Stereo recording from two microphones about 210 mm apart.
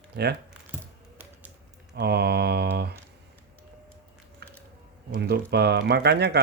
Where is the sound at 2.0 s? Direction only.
50° right (ahead or behind).